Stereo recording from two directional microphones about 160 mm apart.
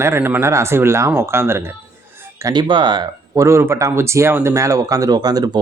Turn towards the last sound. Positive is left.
turn(degrees=-25)  # may be behind; listen again after turning